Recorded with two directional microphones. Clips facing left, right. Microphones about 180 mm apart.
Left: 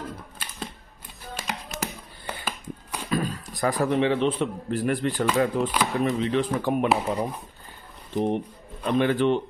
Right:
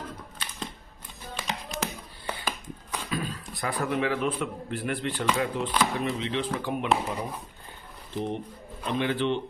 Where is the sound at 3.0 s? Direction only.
45° left (ahead or behind); by 4.4 s 30° left (ahead or behind).